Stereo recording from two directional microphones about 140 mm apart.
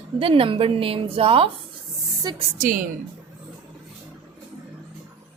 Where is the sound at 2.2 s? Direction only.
30° right (ahead or behind).